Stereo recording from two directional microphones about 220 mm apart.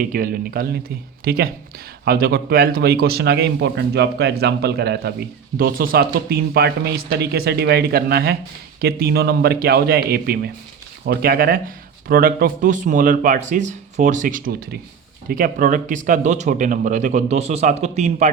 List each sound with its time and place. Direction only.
0.0 s a man's voice: 40° right (ahead or behind)